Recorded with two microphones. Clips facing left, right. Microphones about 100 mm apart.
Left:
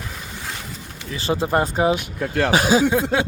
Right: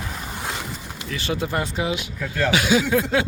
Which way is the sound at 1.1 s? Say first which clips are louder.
Left 5 dB; 30° left (ahead or behind).